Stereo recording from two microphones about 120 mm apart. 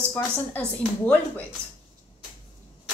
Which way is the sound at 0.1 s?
20° left (ahead or behind).